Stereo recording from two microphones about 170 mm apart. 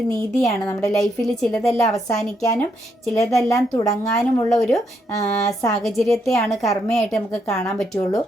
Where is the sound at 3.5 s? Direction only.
20° left (ahead or behind).